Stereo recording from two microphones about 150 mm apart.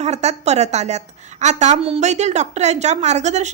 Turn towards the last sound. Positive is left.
turn(degrees=-50)  # may be behind; listen again after turning